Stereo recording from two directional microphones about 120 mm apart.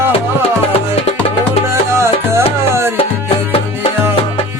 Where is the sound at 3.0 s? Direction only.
55° left (ahead or behind).